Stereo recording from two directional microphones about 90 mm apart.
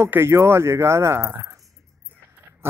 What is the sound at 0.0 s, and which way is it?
Speech, 30° right (ahead or behind).